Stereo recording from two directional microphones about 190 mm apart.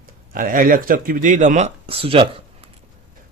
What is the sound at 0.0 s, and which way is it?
Speech, 45° right (ahead or behind).